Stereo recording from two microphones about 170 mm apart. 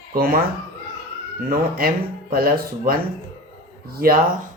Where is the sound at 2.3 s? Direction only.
60° right (ahead or behind).